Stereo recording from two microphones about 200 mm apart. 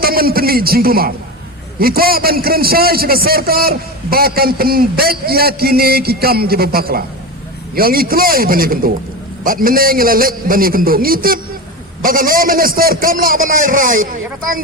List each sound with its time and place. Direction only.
0.0 s a man's voice: 50° right (ahead or behind)